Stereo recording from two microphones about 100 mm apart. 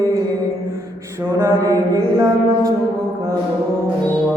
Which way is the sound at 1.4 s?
30° right (ahead or behind).